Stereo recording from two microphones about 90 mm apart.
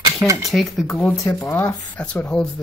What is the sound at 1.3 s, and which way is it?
Speech, 25° left (ahead or behind).